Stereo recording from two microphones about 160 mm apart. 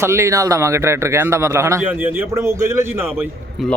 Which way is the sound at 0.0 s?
15° right (ahead or behind).